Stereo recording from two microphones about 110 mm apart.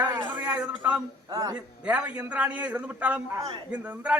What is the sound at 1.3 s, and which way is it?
Speech, 35° right (ahead or behind).